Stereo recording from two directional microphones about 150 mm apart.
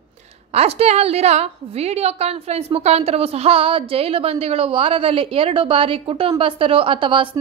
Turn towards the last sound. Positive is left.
turn(degrees=-35)  # may be behind; listen again after turning